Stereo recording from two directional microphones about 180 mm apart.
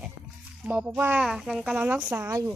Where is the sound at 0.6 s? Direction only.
5° right (ahead or behind).